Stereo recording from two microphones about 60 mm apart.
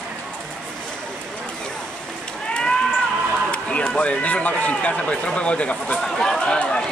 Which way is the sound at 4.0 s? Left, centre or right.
Left.